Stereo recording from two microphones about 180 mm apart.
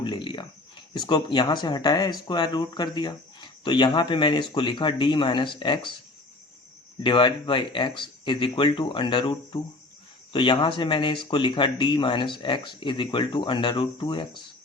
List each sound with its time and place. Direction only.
0.0 s a sound: 25° left (ahead or behind)
0.9 s speech: 25° left (ahead or behind)
7.0 s speech: 25° left (ahead or behind)